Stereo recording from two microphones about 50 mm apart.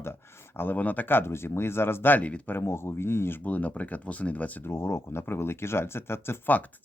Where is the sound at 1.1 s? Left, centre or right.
Left.